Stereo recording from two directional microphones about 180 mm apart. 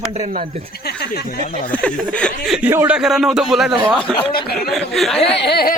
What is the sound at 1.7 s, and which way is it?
A man's voice, 5° left (ahead or behind).